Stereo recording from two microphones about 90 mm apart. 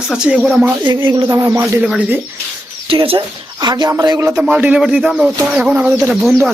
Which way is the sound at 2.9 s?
75° right (ahead or behind).